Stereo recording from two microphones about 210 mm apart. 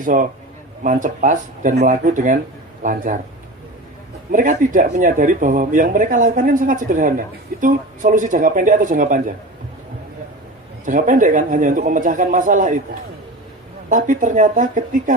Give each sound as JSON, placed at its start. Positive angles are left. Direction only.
{"t": 0.0, "sound": "speech", "side_deg": -40}
{"t": 4.3, "sound": "speech", "side_deg": -40}
{"t": 10.8, "sound": "speech", "side_deg": -40}